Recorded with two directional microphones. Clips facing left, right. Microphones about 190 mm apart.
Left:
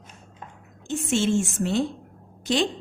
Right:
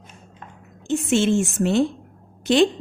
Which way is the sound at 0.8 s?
65° right (ahead or behind).